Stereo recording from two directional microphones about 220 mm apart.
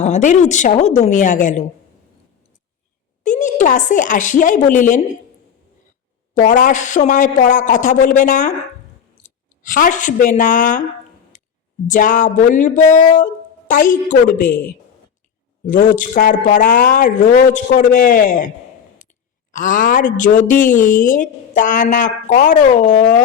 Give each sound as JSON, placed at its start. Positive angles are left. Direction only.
{"t": 0.0, "sound": "a woman's voice", "side_deg": 35}
{"t": 3.2, "sound": "a woman's voice", "side_deg": 35}
{"t": 6.3, "sound": "a woman's voice", "side_deg": 35}
{"t": 11.3, "sound": "a sound", "side_deg": 35}
{"t": 11.9, "sound": "a woman's voice", "side_deg": 35}
{"t": 15.6, "sound": "a woman's voice", "side_deg": 35}